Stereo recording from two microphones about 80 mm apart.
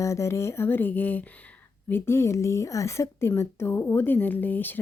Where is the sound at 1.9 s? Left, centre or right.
Left.